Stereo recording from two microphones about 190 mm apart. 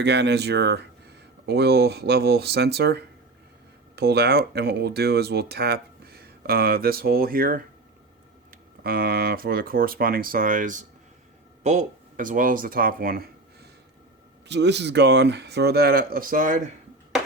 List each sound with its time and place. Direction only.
0.0 s speech: 65° right (ahead or behind)
14.4 s speech: 65° right (ahead or behind); by 16.6 s 45° right (ahead or behind)